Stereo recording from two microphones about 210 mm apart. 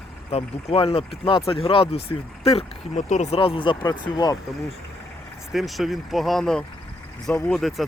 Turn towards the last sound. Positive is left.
turn(degrees=0)  # may be behind; listen again after turning